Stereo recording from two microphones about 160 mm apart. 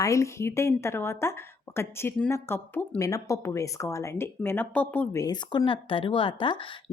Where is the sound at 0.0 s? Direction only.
20° left (ahead or behind).